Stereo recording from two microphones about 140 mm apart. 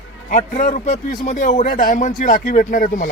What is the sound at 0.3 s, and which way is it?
A man's voice, 65° left (ahead or behind).